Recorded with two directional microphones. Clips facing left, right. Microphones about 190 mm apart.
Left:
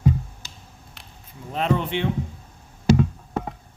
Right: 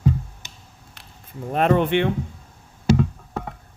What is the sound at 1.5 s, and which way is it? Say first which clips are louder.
Speech: right 5 dB; 55° right (ahead or behind).